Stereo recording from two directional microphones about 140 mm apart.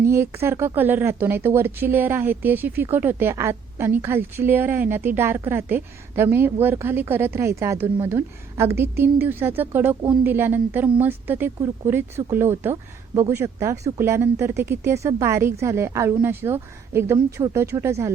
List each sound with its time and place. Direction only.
0.0 s speech: 20° right (ahead or behind)